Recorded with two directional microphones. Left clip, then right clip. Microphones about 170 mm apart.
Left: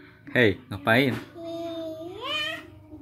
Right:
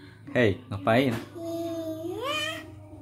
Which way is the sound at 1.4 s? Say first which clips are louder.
Right 1 dB; 25° right (ahead or behind).